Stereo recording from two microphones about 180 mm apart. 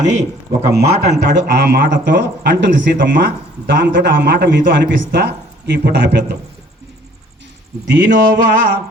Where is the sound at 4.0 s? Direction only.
70° right (ahead or behind).